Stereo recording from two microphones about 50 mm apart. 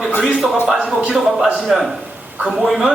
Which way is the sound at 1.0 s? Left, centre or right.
Centre.